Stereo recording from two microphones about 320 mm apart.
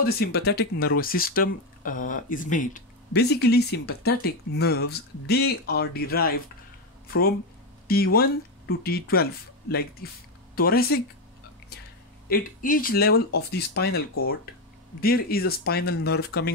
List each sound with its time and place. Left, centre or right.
0.0 s speech: left
7.9 s speech: left
11.7 s a sound: left
12.3 s speech: left